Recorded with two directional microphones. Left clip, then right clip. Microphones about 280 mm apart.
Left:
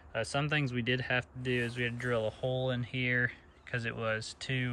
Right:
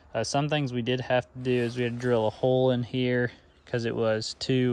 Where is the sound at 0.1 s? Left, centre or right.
Centre.